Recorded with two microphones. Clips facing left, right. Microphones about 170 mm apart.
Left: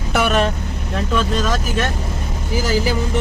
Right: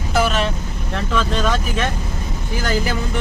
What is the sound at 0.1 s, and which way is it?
Vehicle, 65° left (ahead or behind).